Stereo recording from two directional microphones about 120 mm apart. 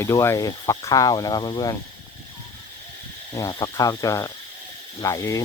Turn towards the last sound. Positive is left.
turn(degrees=30)  # may be behind; listen again after turning